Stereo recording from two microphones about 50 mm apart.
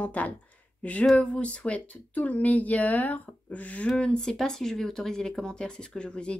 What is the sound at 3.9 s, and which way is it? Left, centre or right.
Speech, centre.